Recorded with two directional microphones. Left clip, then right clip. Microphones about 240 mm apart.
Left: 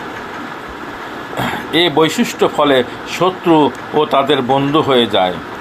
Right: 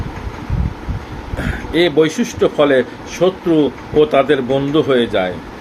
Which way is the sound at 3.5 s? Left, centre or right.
Left.